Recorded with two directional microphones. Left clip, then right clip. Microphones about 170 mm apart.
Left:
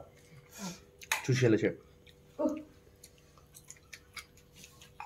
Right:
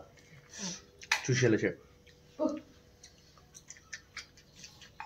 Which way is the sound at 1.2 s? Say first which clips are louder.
Left 2 dB; 10° left (ahead or behind).